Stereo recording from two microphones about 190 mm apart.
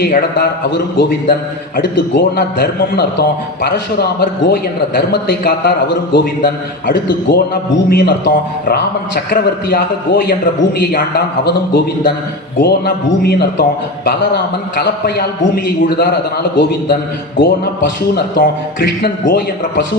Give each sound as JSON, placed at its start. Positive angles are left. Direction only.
{"t": 0.0, "sound": "a man's voice", "side_deg": 55}
{"t": 11.4, "sound": "a man's voice", "side_deg": 60}